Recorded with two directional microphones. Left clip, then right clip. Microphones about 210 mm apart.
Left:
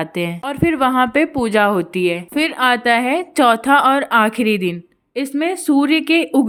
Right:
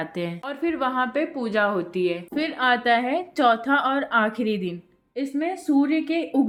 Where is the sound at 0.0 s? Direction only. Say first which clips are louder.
Left 8 dB; 30° left (ahead or behind).